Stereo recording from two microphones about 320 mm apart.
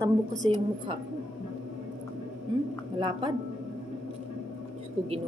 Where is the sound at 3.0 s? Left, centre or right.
Centre.